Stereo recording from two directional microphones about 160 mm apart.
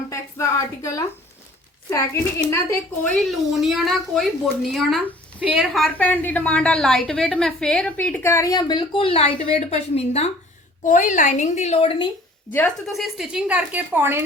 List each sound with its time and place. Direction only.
0.1 s a sound: 20° left (ahead or behind)
1.9 s a woman's voice: 20° left (ahead or behind)
3.2 s a woman's voice: centre (ahead or behind); by 10.2 s 40° left (ahead or behind)
10.8 s a woman's voice: 50° left (ahead or behind); by 12.0 s 35° left (ahead or behind)
12.5 s a woman's voice: 10° left (ahead or behind)
12.9 s a woman's voice: centre (ahead or behind)